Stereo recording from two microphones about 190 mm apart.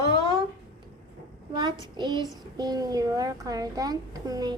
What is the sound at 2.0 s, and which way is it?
A child's voice, 25° right (ahead or behind).